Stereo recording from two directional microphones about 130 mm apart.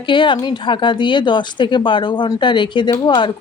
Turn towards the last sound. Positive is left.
turn(degrees=35)  # may be behind; listen again after turning